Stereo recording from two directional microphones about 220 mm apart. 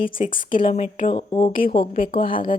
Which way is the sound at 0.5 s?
25° left (ahead or behind).